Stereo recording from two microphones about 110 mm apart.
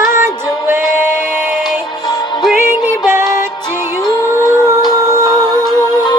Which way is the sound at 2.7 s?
20° right (ahead or behind).